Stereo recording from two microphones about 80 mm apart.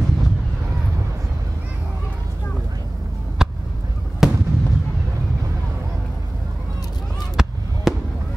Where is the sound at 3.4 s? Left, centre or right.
Centre.